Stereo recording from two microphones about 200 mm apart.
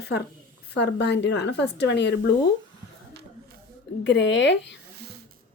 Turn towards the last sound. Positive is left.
turn(degrees=60)  # may be behind; listen again after turning